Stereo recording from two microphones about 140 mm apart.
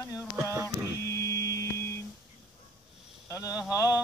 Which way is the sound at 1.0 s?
20° left (ahead or behind).